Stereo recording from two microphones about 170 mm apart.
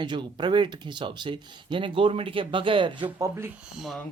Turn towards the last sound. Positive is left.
turn(degrees=0)  # may be behind; listen again after turning